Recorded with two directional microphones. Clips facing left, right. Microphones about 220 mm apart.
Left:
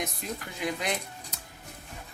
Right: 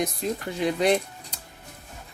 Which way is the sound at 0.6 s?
30° right (ahead or behind).